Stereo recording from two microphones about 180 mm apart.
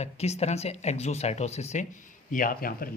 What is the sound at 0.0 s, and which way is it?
Speech, 35° left (ahead or behind).